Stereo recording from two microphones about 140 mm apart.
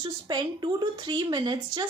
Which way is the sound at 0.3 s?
30° right (ahead or behind).